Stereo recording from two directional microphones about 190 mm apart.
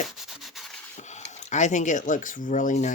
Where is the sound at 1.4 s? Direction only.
40° left (ahead or behind).